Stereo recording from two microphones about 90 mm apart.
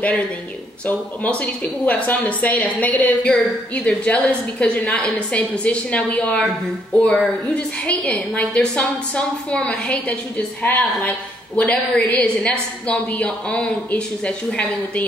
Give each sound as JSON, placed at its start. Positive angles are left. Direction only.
{"t": 0.8, "sound": "a woman's voice", "side_deg": 15}